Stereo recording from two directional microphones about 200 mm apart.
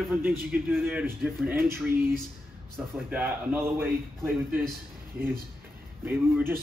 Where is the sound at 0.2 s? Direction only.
10° right (ahead or behind).